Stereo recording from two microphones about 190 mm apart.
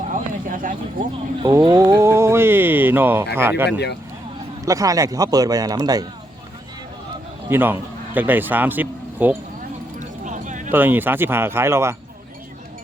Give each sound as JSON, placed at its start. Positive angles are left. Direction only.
{"t": 0.1, "sound": "a sound", "side_deg": -45}
{"t": 1.4, "sound": "speech", "side_deg": -20}
{"t": 3.7, "sound": "speech", "side_deg": 60}
{"t": 4.6, "sound": "speech", "side_deg": -15}
{"t": 7.5, "sound": "speech", "side_deg": -10}
{"t": 10.0, "sound": "a sound", "side_deg": -40}
{"t": 10.7, "sound": "speech", "side_deg": -10}